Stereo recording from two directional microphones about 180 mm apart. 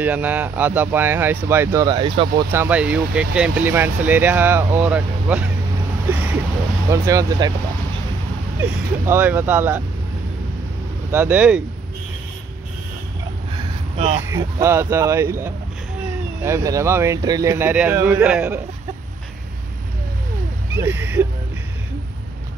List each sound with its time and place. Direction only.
0.0 s speech: 10° right (ahead or behind); by 2.4 s 25° right (ahead or behind)
2.5 s speech: 10° right (ahead or behind)
6.1 s a sound: 10° right (ahead or behind)
6.9 s speech: 20° right (ahead or behind)
8.5 s speech: 15° right (ahead or behind)
11.1 s speech: 10° right (ahead or behind)
13.9 s speech: 35° right (ahead or behind)
14.2 s speech: 15° right (ahead or behind)
20.8 s speech: 10° right (ahead or behind)